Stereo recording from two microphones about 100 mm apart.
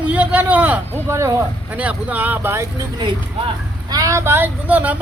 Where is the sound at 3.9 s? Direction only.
35° right (ahead or behind); by 4.9 s 15° right (ahead or behind).